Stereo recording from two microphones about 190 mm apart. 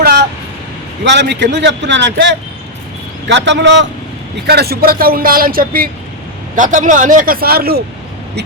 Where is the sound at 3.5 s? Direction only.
70° right (ahead or behind).